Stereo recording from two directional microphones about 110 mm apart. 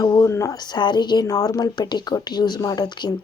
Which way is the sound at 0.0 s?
30° left (ahead or behind).